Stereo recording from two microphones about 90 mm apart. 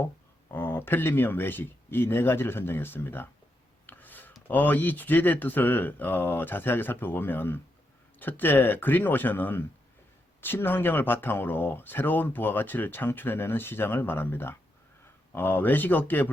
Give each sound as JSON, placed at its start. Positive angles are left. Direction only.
{"t": 0.0, "sound": "speech", "side_deg": 25}
{"t": 3.8, "sound": "a sound", "side_deg": 20}
{"t": 4.4, "sound": "speech", "side_deg": 20}